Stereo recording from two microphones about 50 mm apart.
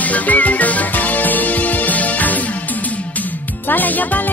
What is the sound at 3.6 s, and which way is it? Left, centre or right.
Music, left.